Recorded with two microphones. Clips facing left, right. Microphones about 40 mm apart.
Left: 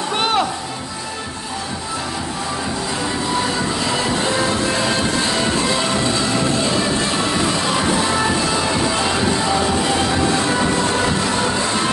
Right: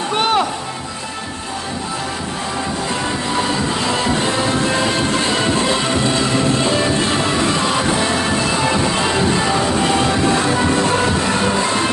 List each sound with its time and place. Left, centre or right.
0.2 s music: centre